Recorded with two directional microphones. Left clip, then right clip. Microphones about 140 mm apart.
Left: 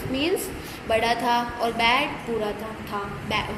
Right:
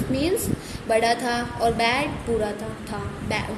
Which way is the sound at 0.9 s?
70° right (ahead or behind).